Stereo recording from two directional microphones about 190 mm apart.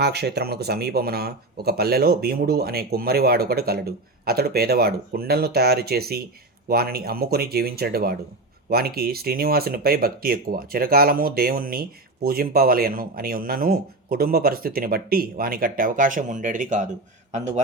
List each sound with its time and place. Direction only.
0.0 s a man's voice: 60° right (ahead or behind); by 17.6 s 35° right (ahead or behind)